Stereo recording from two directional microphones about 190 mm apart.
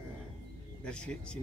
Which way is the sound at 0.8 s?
5° left (ahead or behind).